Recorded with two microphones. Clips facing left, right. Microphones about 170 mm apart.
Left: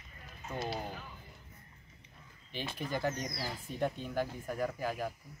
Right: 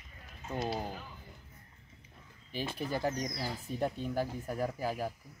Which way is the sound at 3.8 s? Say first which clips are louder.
Even; centre (ahead or behind).